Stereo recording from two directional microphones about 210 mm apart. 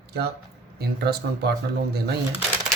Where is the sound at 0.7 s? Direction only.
50° right (ahead or behind).